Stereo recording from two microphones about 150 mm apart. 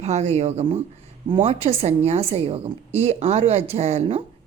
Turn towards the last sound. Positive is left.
turn(degrees=-45)  # may be behind; listen again after turning